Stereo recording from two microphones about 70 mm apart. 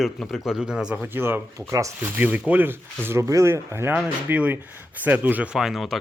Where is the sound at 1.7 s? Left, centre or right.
Right.